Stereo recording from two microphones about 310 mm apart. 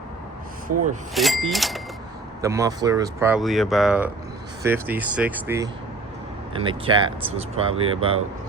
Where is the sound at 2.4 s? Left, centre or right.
Centre.